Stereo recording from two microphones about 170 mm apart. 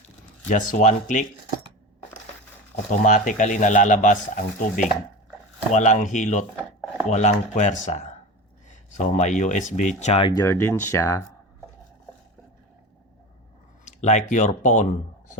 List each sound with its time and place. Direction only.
0.4 s speech: 45° left (ahead or behind)
2.9 s speech: 50° left (ahead or behind)
10.0 s speech: 35° left (ahead or behind)
10.4 s speech: 15° left (ahead or behind)
13.8 s speech: 45° left (ahead or behind)